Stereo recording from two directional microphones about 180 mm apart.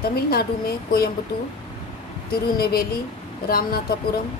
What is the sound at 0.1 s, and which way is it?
Speech, 60° left (ahead or behind).